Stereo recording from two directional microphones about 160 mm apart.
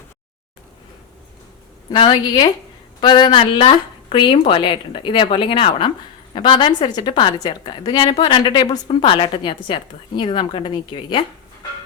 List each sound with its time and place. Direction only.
1.9 s a woman's voice: 25° left (ahead or behind)